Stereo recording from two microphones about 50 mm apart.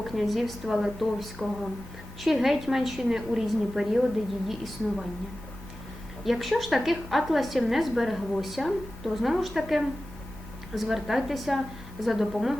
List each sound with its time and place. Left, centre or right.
0.0 s a woman's voice: centre
6.2 s a woman's voice: centre